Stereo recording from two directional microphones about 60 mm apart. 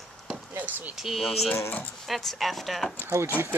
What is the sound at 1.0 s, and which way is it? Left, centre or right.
Speech, centre.